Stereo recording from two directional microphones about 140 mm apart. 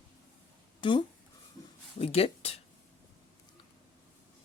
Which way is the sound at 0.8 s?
35° left (ahead or behind).